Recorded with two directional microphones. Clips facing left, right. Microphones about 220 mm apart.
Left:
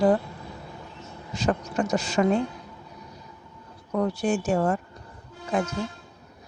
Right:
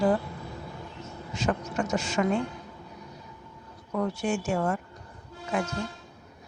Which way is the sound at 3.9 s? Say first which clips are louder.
Left 4 dB; 35° left (ahead or behind).